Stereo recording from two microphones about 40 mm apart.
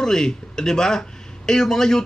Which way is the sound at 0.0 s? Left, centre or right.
Centre.